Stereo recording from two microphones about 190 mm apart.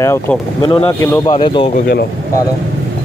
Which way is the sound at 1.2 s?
25° left (ahead or behind).